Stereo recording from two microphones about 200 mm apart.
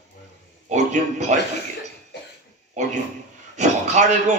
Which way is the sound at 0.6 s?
35° right (ahead or behind).